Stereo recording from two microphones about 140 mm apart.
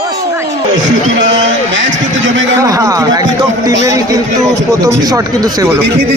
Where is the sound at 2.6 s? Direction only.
25° right (ahead or behind).